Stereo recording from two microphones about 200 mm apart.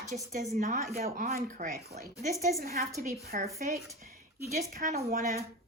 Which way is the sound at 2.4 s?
50° right (ahead or behind).